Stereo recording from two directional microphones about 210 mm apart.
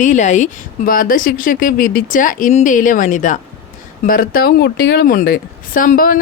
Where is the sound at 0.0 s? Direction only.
35° left (ahead or behind).